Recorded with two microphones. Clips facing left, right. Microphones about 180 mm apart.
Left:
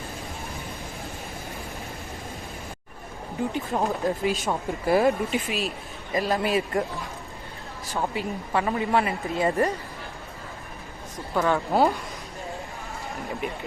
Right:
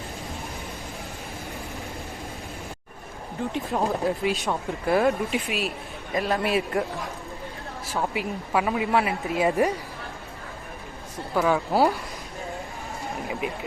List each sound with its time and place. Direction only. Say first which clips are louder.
3.5 s speech: right 3 dB; centre (ahead or behind)
7.9 s speech: even; centre (ahead or behind)
11.3 s speech: even; 5° right (ahead or behind)
13.1 s speech: right 1 dB; centre (ahead or behind)